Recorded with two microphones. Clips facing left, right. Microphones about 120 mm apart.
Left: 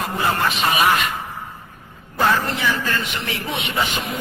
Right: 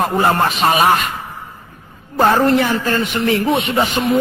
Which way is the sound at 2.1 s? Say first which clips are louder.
Right 8 dB; 45° right (ahead or behind).